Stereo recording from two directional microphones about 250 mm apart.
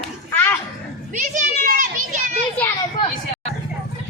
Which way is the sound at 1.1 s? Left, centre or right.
Right.